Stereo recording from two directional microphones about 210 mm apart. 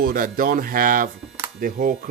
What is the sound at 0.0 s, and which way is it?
Speech, 40° right (ahead or behind).